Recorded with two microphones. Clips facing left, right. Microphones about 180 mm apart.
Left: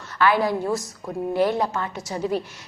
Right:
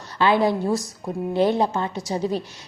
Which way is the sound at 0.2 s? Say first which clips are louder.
Right 1 dB; 25° right (ahead or behind).